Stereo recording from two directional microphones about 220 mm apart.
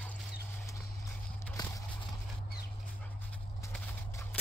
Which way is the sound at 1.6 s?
20° left (ahead or behind).